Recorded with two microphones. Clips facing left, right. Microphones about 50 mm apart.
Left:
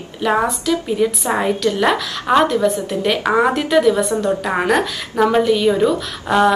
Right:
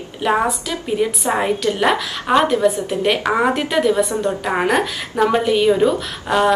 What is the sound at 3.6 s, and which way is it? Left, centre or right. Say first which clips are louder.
A woman's voice: left 2 dB; centre.